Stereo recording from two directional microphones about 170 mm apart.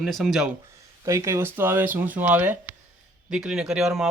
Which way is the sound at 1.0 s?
20° right (ahead or behind).